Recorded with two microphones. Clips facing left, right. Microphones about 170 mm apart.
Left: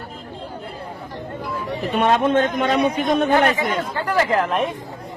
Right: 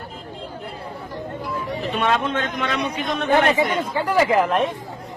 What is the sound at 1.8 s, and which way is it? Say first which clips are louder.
A man's voice: left 4 dB; 45° left (ahead or behind).